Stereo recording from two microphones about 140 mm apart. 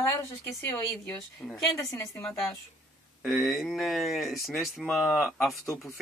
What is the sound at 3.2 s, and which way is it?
Speech, centre (ahead or behind).